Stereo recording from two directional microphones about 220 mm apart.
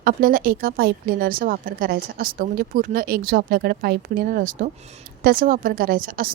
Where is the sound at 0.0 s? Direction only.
40° right (ahead or behind).